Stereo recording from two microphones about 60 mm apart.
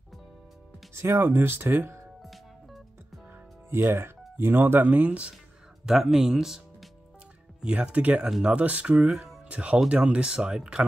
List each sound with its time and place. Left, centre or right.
0.9 s speech: right
2.2 s music: centre
3.7 s speech: right
5.9 s speech: centre
7.6 s speech: right